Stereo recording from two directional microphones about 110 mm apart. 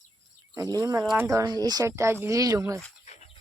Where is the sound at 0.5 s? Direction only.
30° right (ahead or behind).